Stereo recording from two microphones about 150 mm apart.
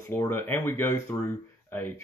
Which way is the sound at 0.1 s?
15° left (ahead or behind).